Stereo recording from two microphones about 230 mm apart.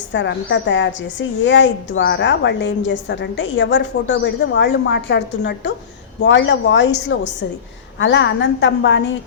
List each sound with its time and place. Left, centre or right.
0.1 s a woman's voice: left